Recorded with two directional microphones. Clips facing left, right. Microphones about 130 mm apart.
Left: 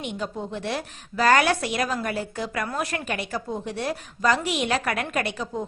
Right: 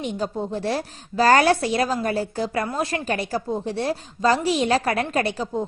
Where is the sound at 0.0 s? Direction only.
35° right (ahead or behind).